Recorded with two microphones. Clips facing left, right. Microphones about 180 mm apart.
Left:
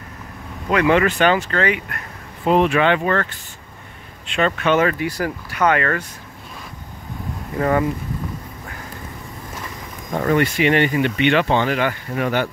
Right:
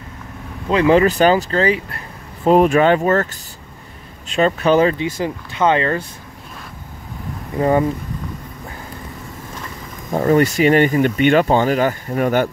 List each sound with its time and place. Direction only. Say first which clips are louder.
0.7 s speech: right 3 dB; 30° right (ahead or behind)
4.3 s speech: right 3 dB; 35° right (ahead or behind)
7.5 s speech: right 3 dB; 25° right (ahead or behind)
10.1 s speech: right 4 dB; 35° right (ahead or behind)